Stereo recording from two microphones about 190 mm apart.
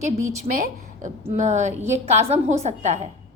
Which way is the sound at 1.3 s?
40° right (ahead or behind).